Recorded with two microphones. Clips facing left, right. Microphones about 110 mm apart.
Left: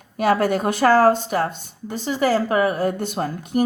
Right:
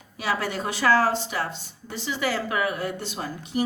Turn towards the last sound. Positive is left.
turn(degrees=50)  # may be behind; listen again after turning